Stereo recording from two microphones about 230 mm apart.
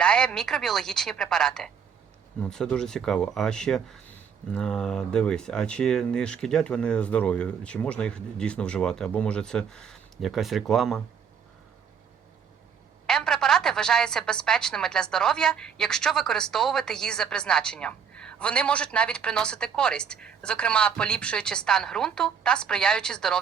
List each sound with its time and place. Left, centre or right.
0.0 s a woman's voice: centre
13.1 s a woman's voice: centre